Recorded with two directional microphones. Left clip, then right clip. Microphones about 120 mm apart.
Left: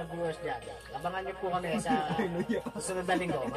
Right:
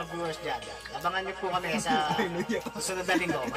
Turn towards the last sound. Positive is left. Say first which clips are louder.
# right 3 dB
turn(degrees=15)  # may be behind; listen again after turning